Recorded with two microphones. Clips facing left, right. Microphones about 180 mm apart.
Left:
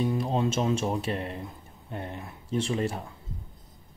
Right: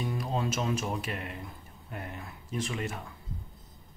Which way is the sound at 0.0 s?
25° left (ahead or behind).